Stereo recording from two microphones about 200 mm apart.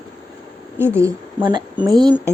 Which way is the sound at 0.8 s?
10° right (ahead or behind).